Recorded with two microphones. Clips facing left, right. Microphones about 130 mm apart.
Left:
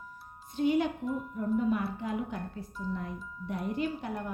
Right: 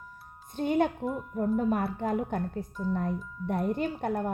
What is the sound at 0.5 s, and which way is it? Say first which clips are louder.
A woman's voice: right 1 dB; 50° right (ahead or behind).